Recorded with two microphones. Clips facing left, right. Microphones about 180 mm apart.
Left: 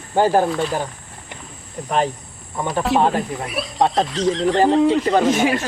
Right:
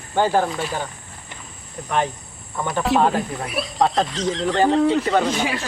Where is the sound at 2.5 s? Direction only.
25° left (ahead or behind).